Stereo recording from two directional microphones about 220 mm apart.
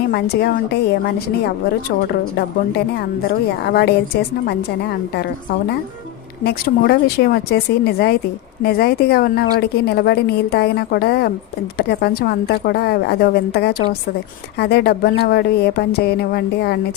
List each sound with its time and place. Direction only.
0.1 s a woman's voice: 45° left (ahead or behind)
3.6 s a woman's voice: 45° left (ahead or behind)
6.4 s a woman's voice: 45° left (ahead or behind)